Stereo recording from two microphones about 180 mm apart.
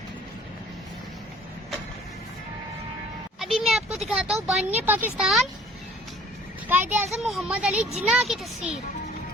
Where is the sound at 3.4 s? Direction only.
Centre (ahead or behind).